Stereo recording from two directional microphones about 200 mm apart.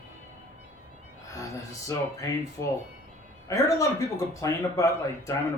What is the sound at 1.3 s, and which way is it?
A man's voice, 15° left (ahead or behind).